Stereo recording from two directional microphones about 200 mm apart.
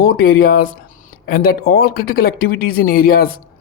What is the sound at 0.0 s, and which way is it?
Speech, 50° left (ahead or behind).